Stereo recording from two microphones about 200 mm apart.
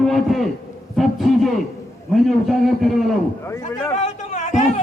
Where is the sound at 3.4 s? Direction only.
15° left (ahead or behind).